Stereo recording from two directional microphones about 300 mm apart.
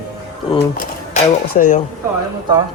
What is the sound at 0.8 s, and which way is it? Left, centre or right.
Speech, left.